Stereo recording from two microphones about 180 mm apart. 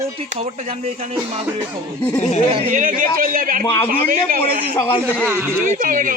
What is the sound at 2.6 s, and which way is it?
Speech, 45° right (ahead or behind).